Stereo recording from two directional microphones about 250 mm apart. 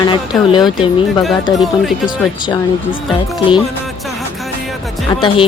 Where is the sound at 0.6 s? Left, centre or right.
Centre.